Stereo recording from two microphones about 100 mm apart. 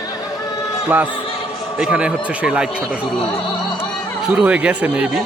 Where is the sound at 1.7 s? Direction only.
10° right (ahead or behind).